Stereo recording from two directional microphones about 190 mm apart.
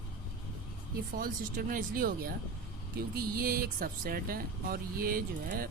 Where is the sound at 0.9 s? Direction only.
50° right (ahead or behind).